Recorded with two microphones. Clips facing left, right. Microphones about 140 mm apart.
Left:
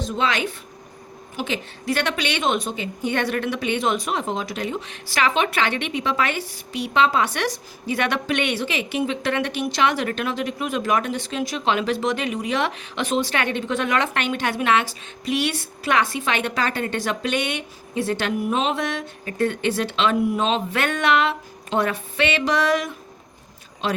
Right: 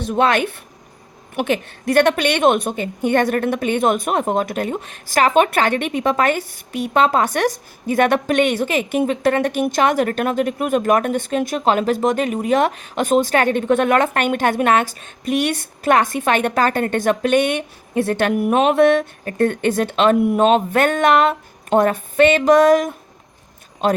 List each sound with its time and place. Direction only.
0.0 s a woman's voice: 55° right (ahead or behind)